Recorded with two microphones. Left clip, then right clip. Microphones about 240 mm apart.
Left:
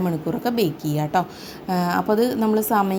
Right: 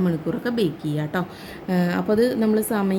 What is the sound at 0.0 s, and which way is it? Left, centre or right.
A woman's voice, centre.